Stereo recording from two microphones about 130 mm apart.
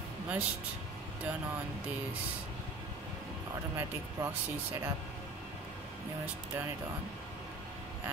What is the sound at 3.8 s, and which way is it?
Speech, 15° right (ahead or behind).